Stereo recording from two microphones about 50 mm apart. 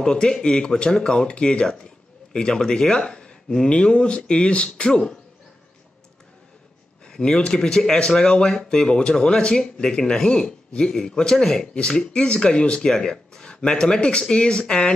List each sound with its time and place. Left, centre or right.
0.0 s speech: centre
7.1 s speech: centre